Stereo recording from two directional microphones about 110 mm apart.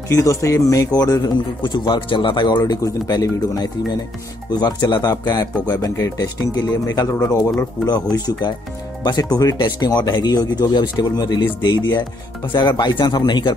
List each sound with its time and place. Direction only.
0.1 s speech: 30° left (ahead or behind)